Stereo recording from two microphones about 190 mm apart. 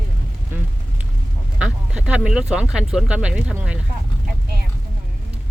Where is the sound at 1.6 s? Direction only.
5° right (ahead or behind).